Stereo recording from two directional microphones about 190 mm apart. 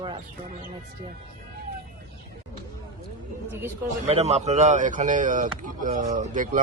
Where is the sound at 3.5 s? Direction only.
10° right (ahead or behind).